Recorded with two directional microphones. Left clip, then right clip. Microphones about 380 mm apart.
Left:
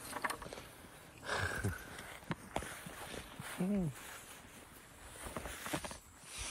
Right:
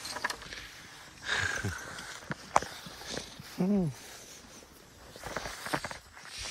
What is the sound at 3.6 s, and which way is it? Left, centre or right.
Speech, right.